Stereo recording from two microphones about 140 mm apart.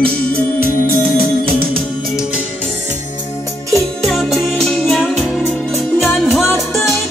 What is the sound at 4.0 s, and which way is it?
Music, centre (ahead or behind).